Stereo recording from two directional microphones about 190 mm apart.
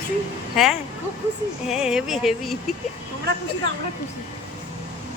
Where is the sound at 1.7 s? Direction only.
5° right (ahead or behind).